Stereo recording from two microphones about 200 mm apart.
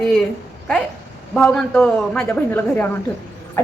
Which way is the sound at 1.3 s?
5° left (ahead or behind).